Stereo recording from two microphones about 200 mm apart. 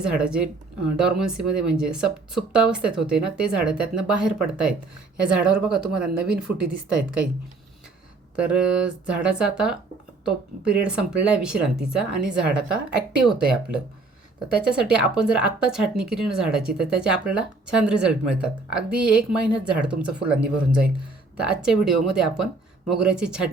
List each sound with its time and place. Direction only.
0.0 s speech: 5° right (ahead or behind)
8.4 s speech: 5° right (ahead or behind)